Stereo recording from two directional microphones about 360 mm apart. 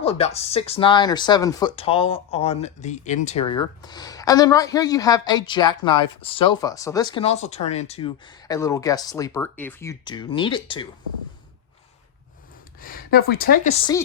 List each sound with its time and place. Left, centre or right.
0.0 s speech: centre
12.8 s speech: left